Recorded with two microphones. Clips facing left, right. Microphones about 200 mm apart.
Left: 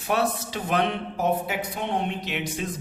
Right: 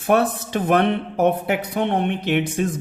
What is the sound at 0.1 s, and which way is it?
Speech, 55° right (ahead or behind).